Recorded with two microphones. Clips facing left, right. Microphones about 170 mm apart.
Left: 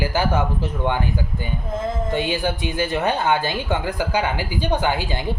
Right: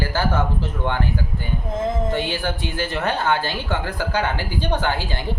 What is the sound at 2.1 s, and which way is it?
Speech, 15° left (ahead or behind).